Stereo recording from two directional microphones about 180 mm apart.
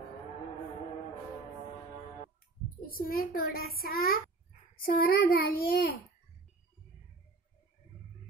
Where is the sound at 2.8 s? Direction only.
55° left (ahead or behind).